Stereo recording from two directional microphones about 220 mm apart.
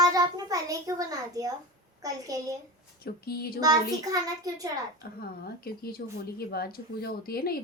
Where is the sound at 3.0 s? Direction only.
45° left (ahead or behind).